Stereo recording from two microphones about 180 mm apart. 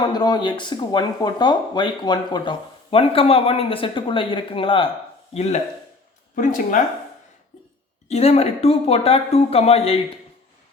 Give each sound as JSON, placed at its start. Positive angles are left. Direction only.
{"t": 0.0, "sound": "speech", "side_deg": 25}
{"t": 8.0, "sound": "speech", "side_deg": 35}